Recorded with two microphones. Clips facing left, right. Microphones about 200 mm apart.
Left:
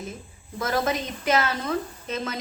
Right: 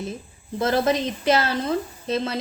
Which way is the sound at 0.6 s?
30° right (ahead or behind).